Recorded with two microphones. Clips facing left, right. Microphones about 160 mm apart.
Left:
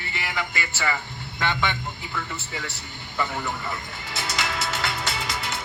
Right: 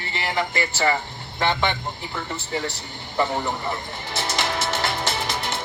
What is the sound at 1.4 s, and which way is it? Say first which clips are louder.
A man's voice: right 4 dB; 25° right (ahead or behind).